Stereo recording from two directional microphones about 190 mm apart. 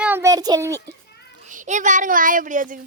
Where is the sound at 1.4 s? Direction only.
40° right (ahead or behind).